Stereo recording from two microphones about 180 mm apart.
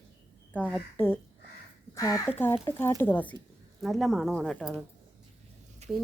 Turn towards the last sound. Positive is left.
turn(degrees=-35)  # may be behind; listen again after turning